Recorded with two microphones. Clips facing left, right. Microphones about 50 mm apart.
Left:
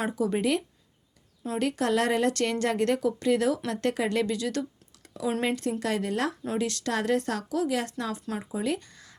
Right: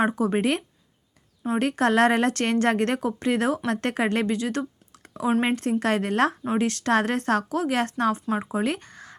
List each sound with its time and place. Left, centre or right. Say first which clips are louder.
0.1 s speech: right 3 dB; right